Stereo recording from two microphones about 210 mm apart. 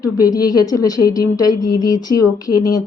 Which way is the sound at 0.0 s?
15° left (ahead or behind).